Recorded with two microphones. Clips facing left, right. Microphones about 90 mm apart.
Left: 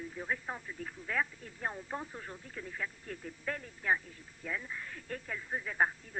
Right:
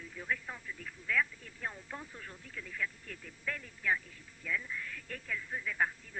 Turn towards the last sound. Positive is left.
turn(degrees=35)  # may be behind; listen again after turning